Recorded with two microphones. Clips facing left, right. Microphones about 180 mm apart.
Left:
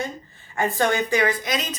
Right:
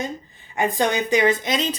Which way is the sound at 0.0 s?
15° right (ahead or behind).